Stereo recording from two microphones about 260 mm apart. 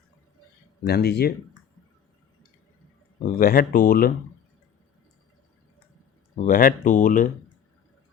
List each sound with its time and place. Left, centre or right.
0.9 s speech: left
3.2 s speech: left
6.4 s speech: left